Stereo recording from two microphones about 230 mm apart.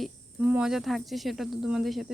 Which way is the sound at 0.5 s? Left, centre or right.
Centre.